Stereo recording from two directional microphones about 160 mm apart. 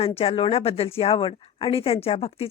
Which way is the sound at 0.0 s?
40° left (ahead or behind).